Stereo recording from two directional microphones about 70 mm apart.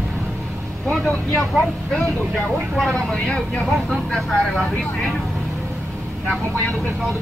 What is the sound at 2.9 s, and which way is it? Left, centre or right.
Speech, centre.